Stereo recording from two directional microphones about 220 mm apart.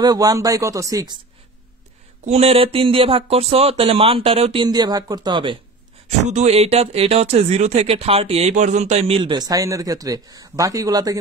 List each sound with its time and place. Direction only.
0.0 s speech: 15° right (ahead or behind)
2.2 s speech: 30° right (ahead or behind)
9.2 s speech: 20° right (ahead or behind)